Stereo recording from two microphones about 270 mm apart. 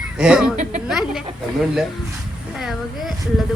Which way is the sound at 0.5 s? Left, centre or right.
Right.